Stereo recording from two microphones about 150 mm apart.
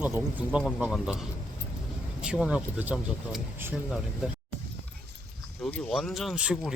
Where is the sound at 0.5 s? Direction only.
5° right (ahead or behind).